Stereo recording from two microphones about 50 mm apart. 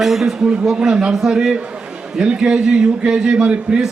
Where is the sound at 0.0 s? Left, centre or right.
Centre.